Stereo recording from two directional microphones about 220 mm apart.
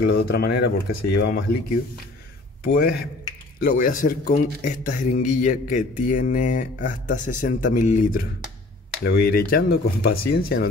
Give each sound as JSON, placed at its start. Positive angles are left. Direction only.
{"t": 0.2, "sound": "speech", "side_deg": 45}
{"t": 2.6, "sound": "a man's voice", "side_deg": 45}